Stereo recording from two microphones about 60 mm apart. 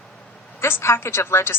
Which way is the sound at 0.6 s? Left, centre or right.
Left.